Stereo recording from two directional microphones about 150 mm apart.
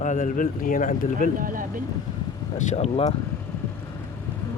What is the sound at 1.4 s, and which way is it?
Speech, 65° right (ahead or behind).